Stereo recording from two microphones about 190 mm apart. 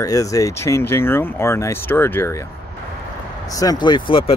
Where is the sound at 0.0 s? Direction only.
20° left (ahead or behind).